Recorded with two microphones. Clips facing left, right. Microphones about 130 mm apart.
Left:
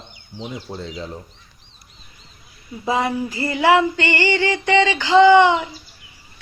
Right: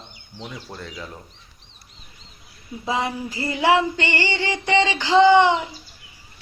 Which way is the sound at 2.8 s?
50° left (ahead or behind).